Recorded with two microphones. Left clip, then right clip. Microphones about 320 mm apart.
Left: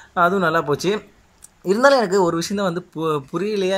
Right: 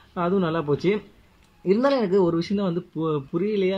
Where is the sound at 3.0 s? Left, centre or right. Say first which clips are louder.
Left 5 dB; left.